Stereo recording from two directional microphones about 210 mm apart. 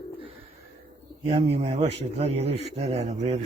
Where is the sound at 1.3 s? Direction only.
30° right (ahead or behind).